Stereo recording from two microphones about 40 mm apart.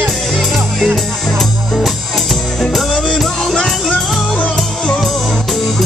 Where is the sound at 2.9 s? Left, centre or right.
Left.